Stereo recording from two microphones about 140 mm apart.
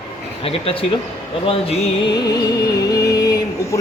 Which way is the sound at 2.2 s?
30° left (ahead or behind).